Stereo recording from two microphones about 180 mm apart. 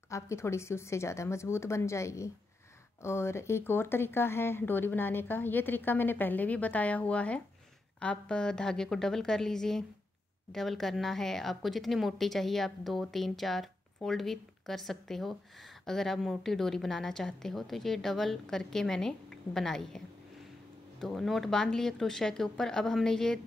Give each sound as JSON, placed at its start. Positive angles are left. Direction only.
{"t": 0.1, "sound": "speech", "side_deg": 15}
{"t": 21.0, "sound": "speech", "side_deg": 0}